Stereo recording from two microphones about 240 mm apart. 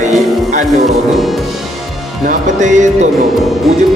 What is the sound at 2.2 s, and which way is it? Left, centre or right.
Speech, right.